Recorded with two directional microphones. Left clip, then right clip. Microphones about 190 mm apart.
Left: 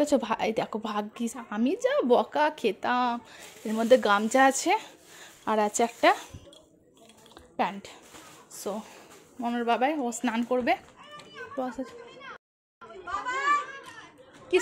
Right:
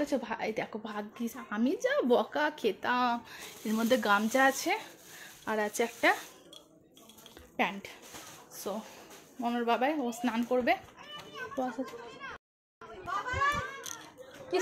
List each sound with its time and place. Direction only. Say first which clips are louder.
0.0 s a woman's voice: left 7 dB; 40° left (ahead or behind); by 6.1 s 20° left (ahead or behind)
7.5 s a woman's voice: left 3 dB; 15° left (ahead or behind)
11.5 s a child's voice: left 2 dB; 10° left (ahead or behind)